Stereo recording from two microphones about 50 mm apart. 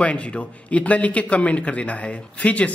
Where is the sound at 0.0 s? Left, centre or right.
Left.